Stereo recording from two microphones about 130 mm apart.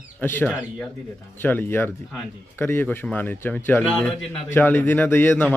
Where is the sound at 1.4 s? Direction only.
15° left (ahead or behind).